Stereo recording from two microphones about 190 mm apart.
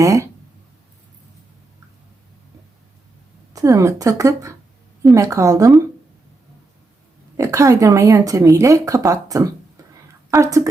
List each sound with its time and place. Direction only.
0.0 s speech: 15° right (ahead or behind)
3.5 s speech: 20° right (ahead or behind)
7.3 s speech: 15° right (ahead or behind)